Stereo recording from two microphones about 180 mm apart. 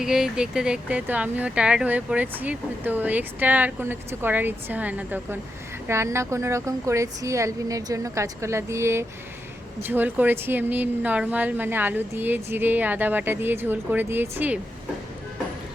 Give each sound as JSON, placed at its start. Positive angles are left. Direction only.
{"t": 0.0, "sound": "speech", "side_deg": -5}